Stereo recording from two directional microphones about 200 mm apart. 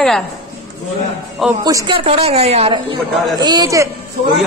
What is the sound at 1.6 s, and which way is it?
Speech, 20° right (ahead or behind).